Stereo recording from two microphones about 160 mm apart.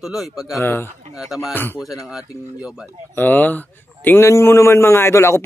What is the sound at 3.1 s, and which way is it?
A man's voice, 10° left (ahead or behind).